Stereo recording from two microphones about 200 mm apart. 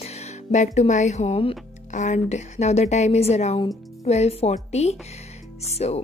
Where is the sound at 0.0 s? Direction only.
35° left (ahead or behind).